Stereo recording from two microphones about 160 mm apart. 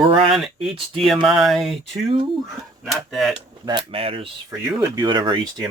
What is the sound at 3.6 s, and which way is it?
Speech, 30° right (ahead or behind).